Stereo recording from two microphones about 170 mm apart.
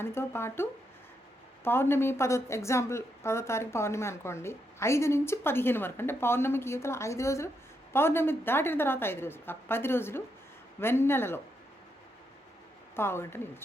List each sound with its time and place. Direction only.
0.0 s a woman's voice: 15° left (ahead or behind)
13.0 s a woman's voice: 15° left (ahead or behind)